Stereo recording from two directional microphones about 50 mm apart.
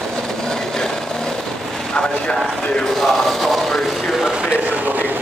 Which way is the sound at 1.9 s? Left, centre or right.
Centre.